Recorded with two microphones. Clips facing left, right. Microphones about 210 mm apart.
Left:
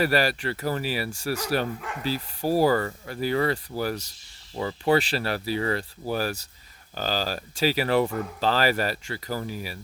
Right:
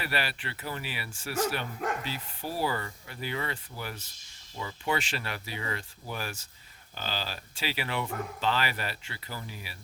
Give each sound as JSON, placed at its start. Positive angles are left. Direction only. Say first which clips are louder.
{"t": 0.0, "sound": "speech", "louder": "left 11 dB", "side_deg": 40}